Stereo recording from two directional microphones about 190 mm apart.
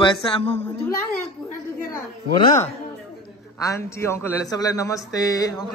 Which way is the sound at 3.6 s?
15° left (ahead or behind).